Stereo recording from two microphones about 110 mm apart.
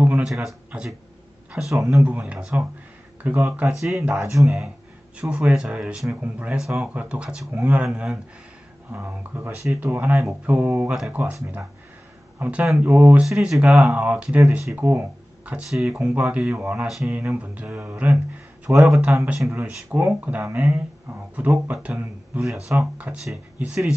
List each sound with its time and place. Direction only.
0.2 s speech: centre (ahead or behind)
3.2 s speech: 15° right (ahead or behind)
4.2 s speech: 25° right (ahead or behind)
5.1 s speech: 10° right (ahead or behind)
12.4 s speech: 10° right (ahead or behind)